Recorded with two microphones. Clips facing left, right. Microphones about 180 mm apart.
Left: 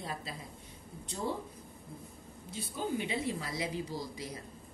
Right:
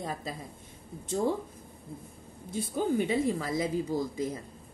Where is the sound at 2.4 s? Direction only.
50° right (ahead or behind).